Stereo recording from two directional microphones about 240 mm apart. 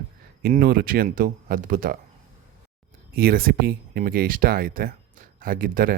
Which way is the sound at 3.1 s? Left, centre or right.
Right.